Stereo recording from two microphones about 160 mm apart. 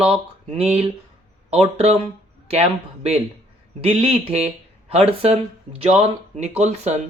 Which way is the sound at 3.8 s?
40° right (ahead or behind).